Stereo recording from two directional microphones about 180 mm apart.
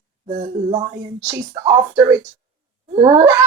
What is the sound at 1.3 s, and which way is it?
Speech, 20° right (ahead or behind).